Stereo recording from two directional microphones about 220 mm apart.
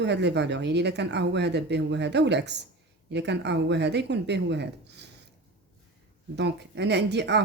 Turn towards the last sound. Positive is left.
turn(degrees=-50)  # may be behind; listen again after turning